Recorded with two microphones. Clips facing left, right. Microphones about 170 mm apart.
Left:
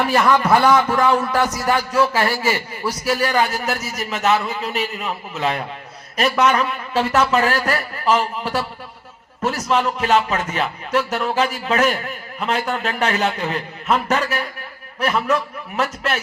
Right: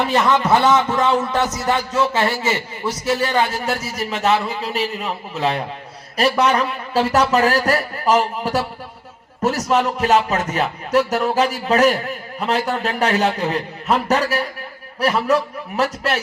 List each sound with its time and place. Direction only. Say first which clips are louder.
0.0 s a man's voice: left 1 dB; 20° right (ahead or behind)